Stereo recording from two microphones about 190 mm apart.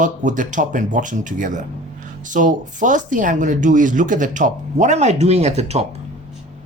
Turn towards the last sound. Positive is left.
turn(degrees=-35)  # may be behind; listen again after turning